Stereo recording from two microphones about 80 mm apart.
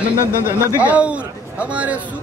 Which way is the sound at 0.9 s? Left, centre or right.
Centre.